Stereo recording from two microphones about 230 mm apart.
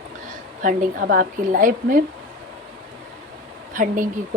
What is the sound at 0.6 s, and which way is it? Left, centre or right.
A woman's voice, right.